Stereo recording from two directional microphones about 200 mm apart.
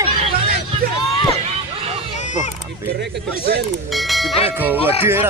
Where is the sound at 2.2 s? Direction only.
35° left (ahead or behind).